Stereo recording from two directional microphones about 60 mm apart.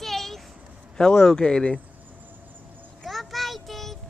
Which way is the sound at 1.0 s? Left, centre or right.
Centre.